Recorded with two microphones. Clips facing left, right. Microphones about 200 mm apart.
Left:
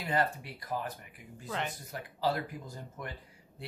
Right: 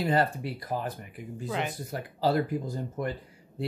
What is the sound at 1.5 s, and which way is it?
Speech, 10° right (ahead or behind).